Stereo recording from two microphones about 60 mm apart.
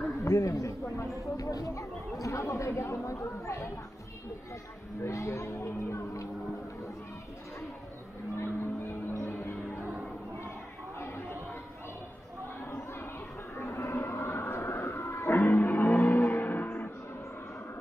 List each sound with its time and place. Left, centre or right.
0.2 s speech: left
1.3 s speech: left
2.2 s speech: left
5.0 s speech: left
8.4 s vehicle: left
11.0 s chatter: left
13.6 s a sound: left
15.4 s music: left